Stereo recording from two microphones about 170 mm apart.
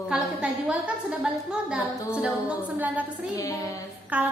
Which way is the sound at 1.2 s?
5° right (ahead or behind).